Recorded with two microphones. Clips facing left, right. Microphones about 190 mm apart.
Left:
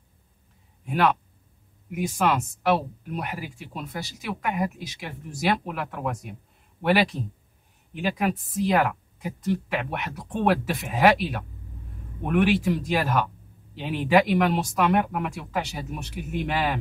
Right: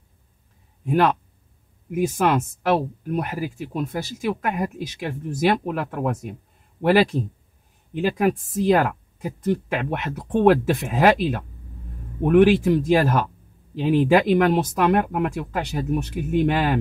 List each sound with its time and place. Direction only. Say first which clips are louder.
0.8 s speech: right 4 dB; 45° right (ahead or behind)
2.1 s speech: right 3 dB; 50° right (ahead or behind)
8.2 s speech: right 4 dB; 45° right (ahead or behind)